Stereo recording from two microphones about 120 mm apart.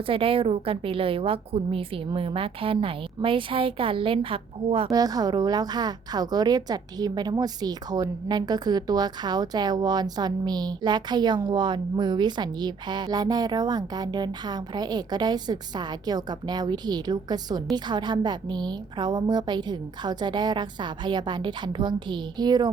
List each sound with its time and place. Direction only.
0.1 s a woman's voice: 50° right (ahead or behind)
4.9 s a woman's voice: 30° right (ahead or behind)